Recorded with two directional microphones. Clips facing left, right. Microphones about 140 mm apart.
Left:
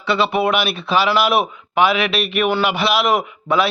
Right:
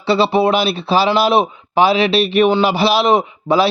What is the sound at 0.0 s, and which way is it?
A man's voice, 30° right (ahead or behind).